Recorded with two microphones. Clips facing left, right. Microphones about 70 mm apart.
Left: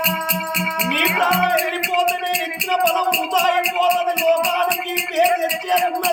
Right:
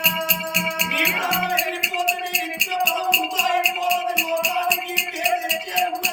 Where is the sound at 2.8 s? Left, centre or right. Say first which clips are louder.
Left 3 dB; left.